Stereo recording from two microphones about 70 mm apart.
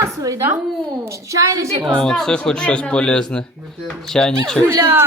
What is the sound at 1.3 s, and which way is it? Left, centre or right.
Speech, right.